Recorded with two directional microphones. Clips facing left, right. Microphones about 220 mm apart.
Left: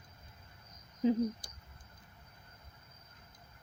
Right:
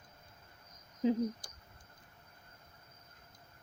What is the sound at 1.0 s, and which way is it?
Speech, centre (ahead or behind).